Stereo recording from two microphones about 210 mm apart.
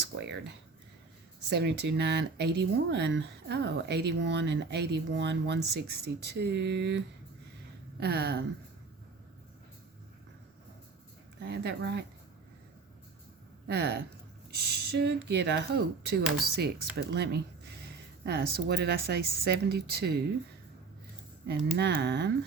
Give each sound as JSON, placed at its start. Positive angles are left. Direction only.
{"t": 0.2, "sound": "speech", "side_deg": -55}
{"t": 11.4, "sound": "speech", "side_deg": -55}
{"t": 13.7, "sound": "speech", "side_deg": -50}
{"t": 21.8, "sound": "speech", "side_deg": -50}